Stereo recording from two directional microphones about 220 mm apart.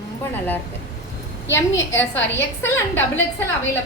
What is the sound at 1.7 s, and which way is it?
Speech, 55° left (ahead or behind).